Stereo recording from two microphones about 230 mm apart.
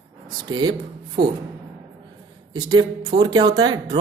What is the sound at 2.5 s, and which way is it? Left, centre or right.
Speech, centre.